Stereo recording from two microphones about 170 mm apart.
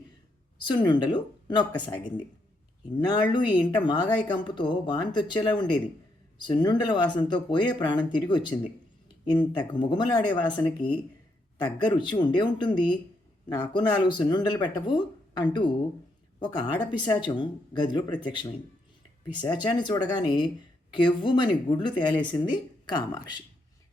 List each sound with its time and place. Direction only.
0.9 s speech: 25° left (ahead or behind)